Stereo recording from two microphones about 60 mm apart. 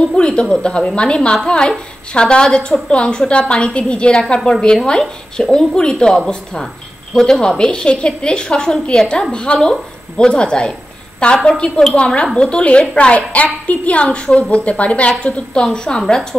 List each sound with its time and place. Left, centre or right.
0.1 s a woman's voice: centre